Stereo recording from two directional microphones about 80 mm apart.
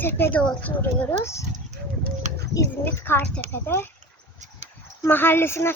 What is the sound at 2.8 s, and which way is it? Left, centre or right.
Speech, left.